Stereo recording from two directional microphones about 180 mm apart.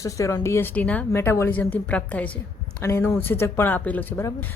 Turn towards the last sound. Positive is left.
turn(degrees=10)  # may be behind; listen again after turning